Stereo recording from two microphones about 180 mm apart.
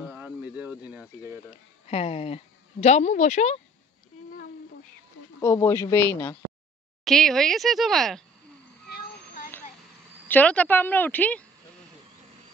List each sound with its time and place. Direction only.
0.0 s cricket: 10° right (ahead or behind)
1.9 s a woman's voice: 35° left (ahead or behind)
5.4 s a woman's voice: 15° left (ahead or behind)
7.1 s speech: centre (ahead or behind)
8.8 s child singing: 60° left (ahead or behind)
10.2 s a woman's voice: 10° left (ahead or behind)